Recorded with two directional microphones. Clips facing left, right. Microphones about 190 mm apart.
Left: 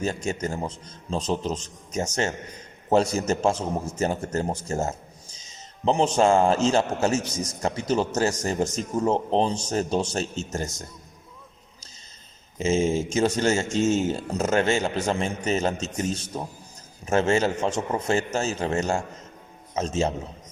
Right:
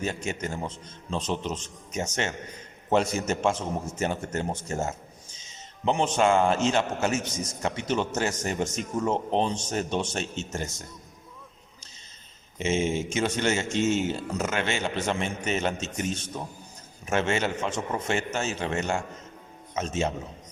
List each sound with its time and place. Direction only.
0.0 s a man's voice: 40° left (ahead or behind)
12.5 s a man's voice: 35° left (ahead or behind)